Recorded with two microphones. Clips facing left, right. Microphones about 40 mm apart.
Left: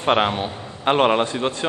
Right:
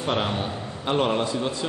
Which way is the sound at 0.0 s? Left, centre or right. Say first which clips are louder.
Left 6 dB; left.